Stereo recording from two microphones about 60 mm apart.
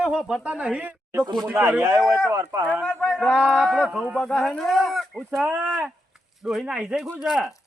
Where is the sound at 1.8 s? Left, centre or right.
Right.